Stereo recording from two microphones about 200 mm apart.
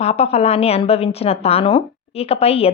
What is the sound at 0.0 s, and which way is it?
A woman's voice, 30° left (ahead or behind).